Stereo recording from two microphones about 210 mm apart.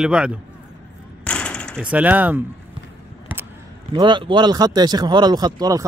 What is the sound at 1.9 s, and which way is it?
Speech, 5° right (ahead or behind).